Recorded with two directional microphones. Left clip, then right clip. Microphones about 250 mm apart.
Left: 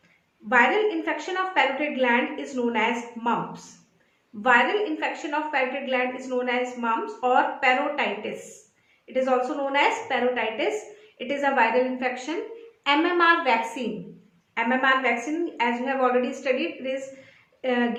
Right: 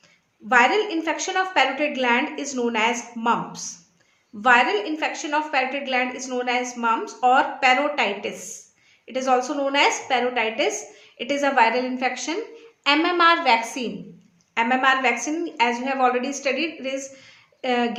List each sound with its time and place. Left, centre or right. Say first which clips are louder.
0.4 s a woman's voice: right 2 dB; right
4.4 s a woman's voice: right 2 dB; right